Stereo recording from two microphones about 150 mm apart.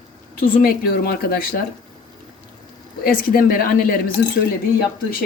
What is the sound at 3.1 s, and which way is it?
Speech, 70° left (ahead or behind).